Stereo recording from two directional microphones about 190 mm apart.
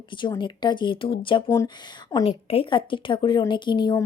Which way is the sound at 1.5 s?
15° left (ahead or behind).